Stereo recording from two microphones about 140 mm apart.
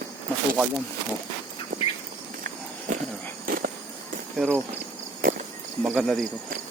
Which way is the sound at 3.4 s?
90° right.